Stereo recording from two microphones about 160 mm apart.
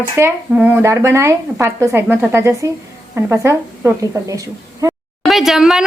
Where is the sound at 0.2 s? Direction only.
15° right (ahead or behind).